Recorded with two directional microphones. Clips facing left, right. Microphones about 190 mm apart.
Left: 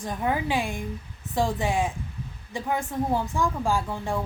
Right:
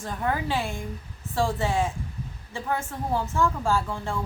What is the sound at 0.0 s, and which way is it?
A woman's voice, 15° left (ahead or behind).